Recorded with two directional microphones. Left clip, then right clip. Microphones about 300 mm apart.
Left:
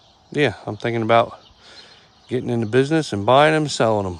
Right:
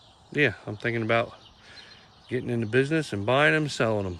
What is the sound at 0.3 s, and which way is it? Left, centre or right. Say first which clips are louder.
Speech: left 4 dB; centre.